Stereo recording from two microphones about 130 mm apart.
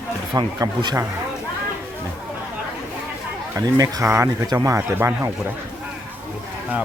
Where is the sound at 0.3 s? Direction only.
35° right (ahead or behind).